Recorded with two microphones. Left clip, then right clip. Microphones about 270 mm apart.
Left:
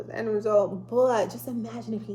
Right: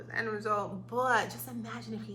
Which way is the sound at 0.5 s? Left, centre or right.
Right.